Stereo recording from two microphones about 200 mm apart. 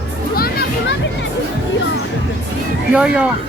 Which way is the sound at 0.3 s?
50° left (ahead or behind).